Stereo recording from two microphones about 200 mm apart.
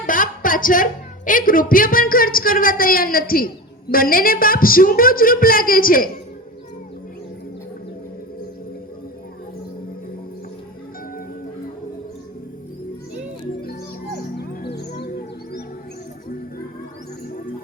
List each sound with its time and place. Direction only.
0.0 s a sound: 45° left (ahead or behind)
1.7 s a woman's voice: 45° left (ahead or behind)
14.3 s music: 50° left (ahead or behind)